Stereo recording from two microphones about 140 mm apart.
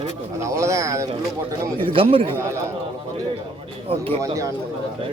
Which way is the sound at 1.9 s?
40° right (ahead or behind).